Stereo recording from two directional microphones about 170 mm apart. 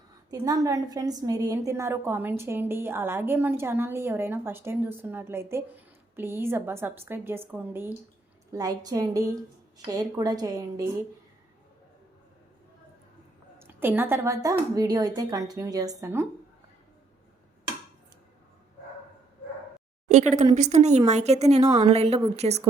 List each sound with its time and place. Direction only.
0.3 s a woman's voice: 20° right (ahead or behind)
13.6 s a woman's voice: 10° right (ahead or behind)
20.1 s speech: 45° right (ahead or behind)
21.6 s a woman's voice: 20° right (ahead or behind)
21.8 s speech: 40° right (ahead or behind)